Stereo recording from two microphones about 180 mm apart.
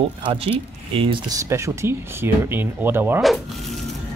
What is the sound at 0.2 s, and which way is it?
Speech, 30° right (ahead or behind).